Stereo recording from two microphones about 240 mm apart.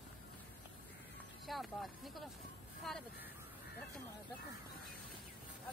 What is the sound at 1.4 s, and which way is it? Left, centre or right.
Speech, centre.